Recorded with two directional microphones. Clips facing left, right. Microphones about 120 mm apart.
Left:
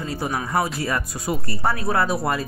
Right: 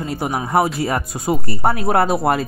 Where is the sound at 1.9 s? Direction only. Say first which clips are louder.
Right 5 dB; 60° right (ahead or behind).